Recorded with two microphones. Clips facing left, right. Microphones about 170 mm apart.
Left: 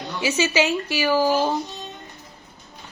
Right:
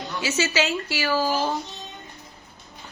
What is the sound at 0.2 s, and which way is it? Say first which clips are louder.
A woman's voice: left 3 dB; 15° left (ahead or behind).